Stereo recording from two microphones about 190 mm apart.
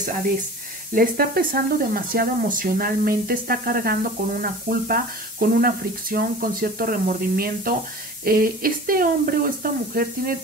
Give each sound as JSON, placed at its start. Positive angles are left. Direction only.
{"t": 0.9, "sound": "speech", "side_deg": -50}